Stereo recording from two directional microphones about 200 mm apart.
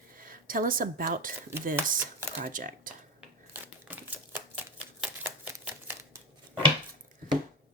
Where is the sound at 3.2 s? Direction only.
10° right (ahead or behind).